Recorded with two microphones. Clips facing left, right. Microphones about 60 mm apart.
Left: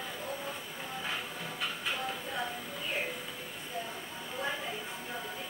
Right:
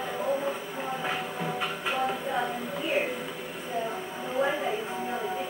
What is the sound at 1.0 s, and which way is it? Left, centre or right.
Music, right.